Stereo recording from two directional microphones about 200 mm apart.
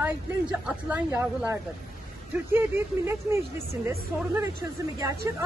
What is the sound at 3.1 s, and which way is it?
Speech, 15° right (ahead or behind).